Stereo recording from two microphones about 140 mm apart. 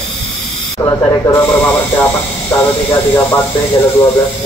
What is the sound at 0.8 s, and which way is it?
Speech, 20° left (ahead or behind).